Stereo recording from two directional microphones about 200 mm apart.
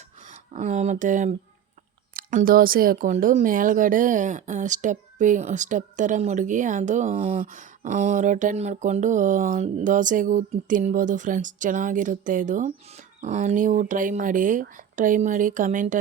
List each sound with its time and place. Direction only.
0.3 s speech: 35° right (ahead or behind)